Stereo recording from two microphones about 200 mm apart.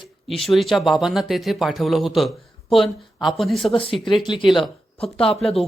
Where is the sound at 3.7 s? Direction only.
25° left (ahead or behind).